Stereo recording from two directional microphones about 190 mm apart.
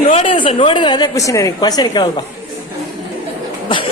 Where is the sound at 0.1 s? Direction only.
30° left (ahead or behind).